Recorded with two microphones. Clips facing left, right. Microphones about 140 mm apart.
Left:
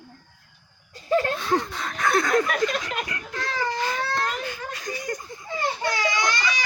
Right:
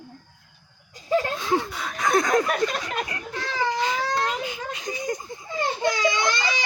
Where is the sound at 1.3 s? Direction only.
10° right (ahead or behind).